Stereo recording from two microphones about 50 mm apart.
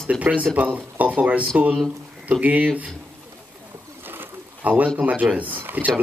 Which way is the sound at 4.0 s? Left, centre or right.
Right.